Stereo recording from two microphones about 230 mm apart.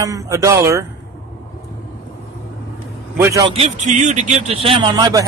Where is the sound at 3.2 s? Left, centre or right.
Centre.